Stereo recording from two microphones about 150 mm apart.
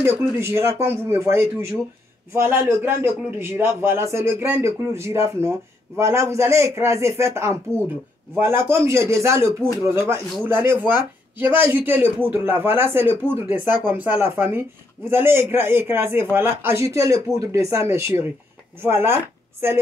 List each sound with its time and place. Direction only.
0.4 s a man's voice: 15° right (ahead or behind)